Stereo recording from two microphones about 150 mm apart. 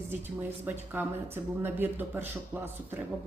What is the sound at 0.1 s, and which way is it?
Speech, 15° right (ahead or behind).